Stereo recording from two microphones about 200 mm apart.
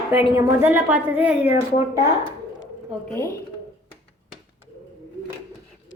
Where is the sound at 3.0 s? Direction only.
10° left (ahead or behind).